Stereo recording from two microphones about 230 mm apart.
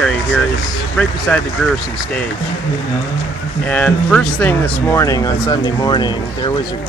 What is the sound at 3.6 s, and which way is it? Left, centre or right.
Speech, centre.